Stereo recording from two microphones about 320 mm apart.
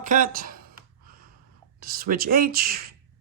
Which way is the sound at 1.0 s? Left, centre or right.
Right.